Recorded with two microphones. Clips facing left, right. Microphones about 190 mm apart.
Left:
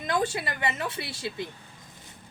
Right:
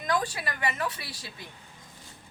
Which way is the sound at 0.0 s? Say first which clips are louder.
Left 2 dB; 25° left (ahead or behind).